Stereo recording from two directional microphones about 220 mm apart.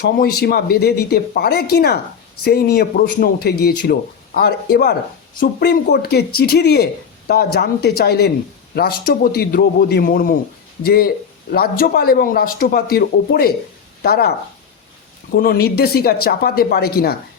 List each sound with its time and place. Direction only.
0.4 s speech: 45° left (ahead or behind)
15.4 s speech: 45° left (ahead or behind)